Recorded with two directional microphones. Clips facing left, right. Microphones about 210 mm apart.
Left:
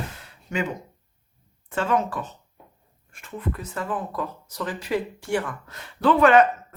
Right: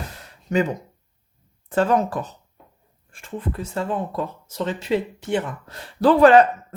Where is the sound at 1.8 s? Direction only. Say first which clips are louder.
Right 5 dB; 40° right (ahead or behind).